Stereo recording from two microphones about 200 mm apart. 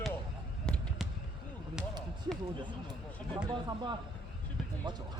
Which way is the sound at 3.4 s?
20° right (ahead or behind).